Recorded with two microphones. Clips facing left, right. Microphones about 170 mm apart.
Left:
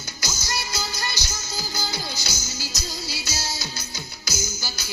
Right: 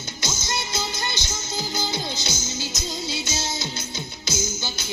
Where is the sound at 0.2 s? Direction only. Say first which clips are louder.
Right 2 dB; 25° right (ahead or behind).